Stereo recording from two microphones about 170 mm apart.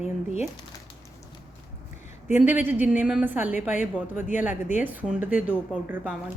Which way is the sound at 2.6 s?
10° right (ahead or behind).